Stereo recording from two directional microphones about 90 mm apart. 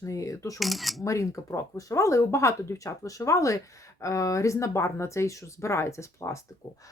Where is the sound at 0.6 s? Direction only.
Centre (ahead or behind).